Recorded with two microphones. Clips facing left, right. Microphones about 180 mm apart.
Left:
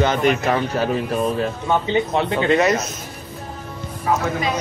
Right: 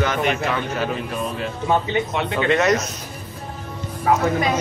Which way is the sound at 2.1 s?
35° left (ahead or behind).